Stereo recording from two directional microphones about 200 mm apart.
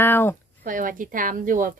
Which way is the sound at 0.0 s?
10° left (ahead or behind).